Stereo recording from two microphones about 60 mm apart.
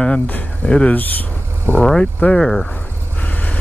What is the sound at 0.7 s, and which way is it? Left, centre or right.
Speech, centre.